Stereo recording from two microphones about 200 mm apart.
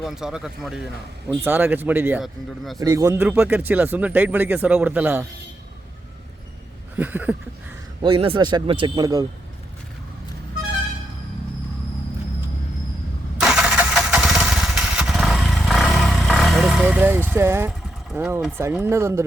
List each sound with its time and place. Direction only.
0.0 s speech: centre (ahead or behind)
2.8 s speech: 15° right (ahead or behind)
6.9 s speech: 10° right (ahead or behind)
8.0 s a man's voice: 25° right (ahead or behind)
13.4 s motorcycle: 5° right (ahead or behind)